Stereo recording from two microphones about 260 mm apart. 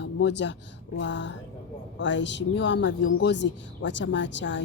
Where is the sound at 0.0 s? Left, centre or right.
Left.